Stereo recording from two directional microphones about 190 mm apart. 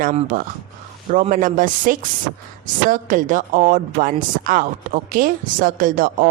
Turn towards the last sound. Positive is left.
turn(degrees=-45)  # may be behind; listen again after turning